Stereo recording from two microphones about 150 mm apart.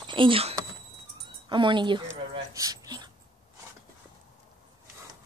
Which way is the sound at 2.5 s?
25° right (ahead or behind).